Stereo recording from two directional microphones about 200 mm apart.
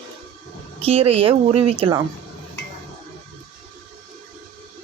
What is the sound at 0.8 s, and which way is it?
Speech, 30° right (ahead or behind).